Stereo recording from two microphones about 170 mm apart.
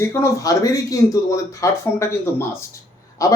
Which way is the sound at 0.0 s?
15° left (ahead or behind).